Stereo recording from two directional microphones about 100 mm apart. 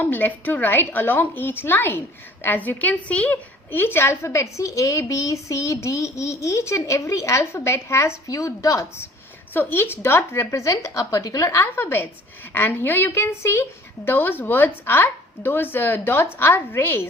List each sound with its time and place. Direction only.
0.0 s a woman's voice: 20° left (ahead or behind)
9.5 s a woman's voice: 20° left (ahead or behind)